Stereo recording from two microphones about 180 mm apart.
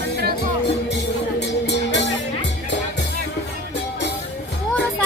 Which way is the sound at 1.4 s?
75° left (ahead or behind).